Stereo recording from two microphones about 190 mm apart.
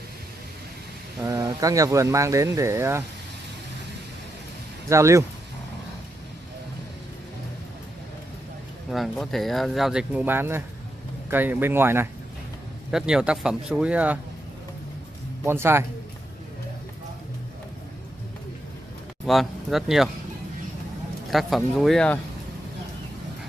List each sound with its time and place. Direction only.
1.2 s speech: 15° right (ahead or behind)
4.8 s speech: 15° right (ahead or behind)
8.9 s speech: centre (ahead or behind)
15.4 s speech: 10° right (ahead or behind)
19.2 s speech: centre (ahead or behind)
21.3 s speech: centre (ahead or behind)